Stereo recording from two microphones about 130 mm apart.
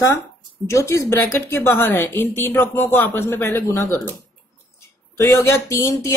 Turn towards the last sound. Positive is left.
turn(degrees=20)  # may be behind; listen again after turning